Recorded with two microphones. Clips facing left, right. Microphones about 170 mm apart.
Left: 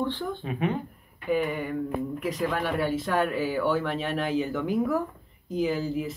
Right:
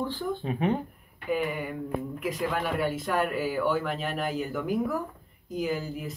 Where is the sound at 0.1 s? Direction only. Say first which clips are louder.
Right 1 dB; 35° right (ahead or behind).